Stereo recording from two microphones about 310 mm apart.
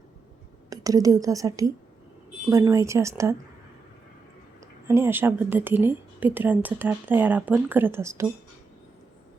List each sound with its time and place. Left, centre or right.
0.7 s speech: centre
4.6 s speech: centre